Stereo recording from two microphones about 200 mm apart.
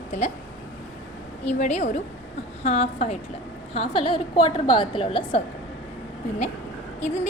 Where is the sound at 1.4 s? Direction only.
35° left (ahead or behind).